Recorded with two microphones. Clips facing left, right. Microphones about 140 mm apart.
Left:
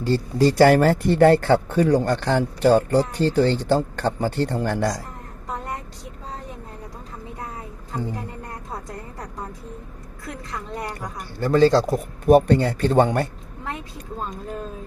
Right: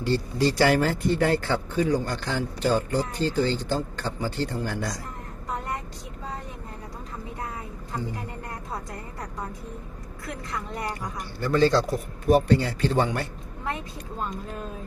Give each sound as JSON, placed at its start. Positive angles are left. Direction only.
{"t": 0.0, "sound": "speech", "side_deg": 40}
{"t": 11.2, "sound": "speech", "side_deg": 45}